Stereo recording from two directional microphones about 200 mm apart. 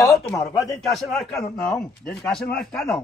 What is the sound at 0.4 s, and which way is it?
Speech, centre (ahead or behind).